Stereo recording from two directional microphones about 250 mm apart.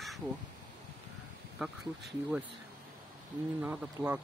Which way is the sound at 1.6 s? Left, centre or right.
Centre.